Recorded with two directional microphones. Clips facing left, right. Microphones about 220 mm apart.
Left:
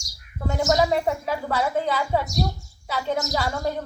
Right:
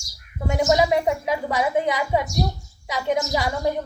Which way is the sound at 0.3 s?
15° right (ahead or behind).